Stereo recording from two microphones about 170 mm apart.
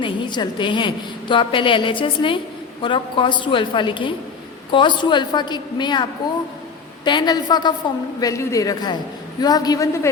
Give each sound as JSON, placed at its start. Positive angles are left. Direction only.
{"t": 0.0, "sound": "a woman's voice", "side_deg": 25}